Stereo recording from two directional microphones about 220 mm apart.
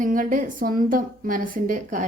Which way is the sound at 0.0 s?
35° right (ahead or behind).